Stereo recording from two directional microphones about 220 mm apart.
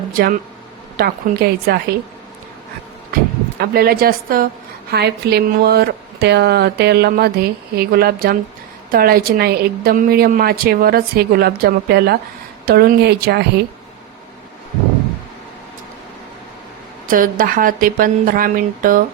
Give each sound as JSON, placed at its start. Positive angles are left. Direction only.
{"t": 0.1, "sound": "speech", "side_deg": -40}
{"t": 3.6, "sound": "speech", "side_deg": -45}
{"t": 17.1, "sound": "speech", "side_deg": -40}